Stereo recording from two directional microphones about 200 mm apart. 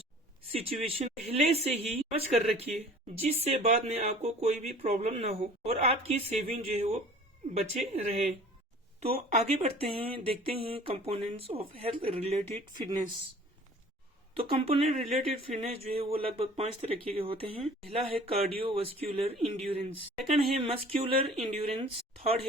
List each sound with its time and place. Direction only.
0.5 s speech: 30° right (ahead or behind)
14.3 s speech: 30° right (ahead or behind)